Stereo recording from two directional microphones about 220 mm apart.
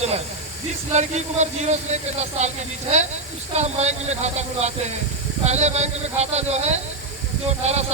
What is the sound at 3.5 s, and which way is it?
Speech, 30° right (ahead or behind).